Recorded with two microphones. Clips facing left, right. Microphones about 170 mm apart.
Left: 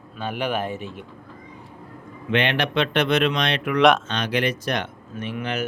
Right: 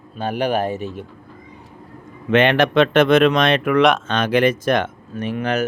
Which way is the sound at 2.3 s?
45° right (ahead or behind).